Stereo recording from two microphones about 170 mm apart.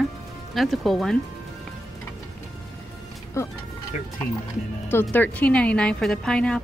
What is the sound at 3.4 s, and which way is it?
Speech, 15° left (ahead or behind).